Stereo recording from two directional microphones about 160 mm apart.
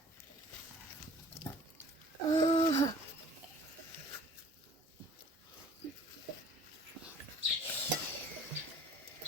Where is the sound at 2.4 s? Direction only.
45° left (ahead or behind).